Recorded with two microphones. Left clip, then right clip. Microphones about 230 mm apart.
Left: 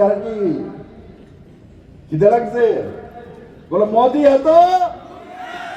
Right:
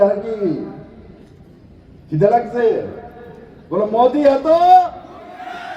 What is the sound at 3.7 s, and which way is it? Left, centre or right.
Speech, right.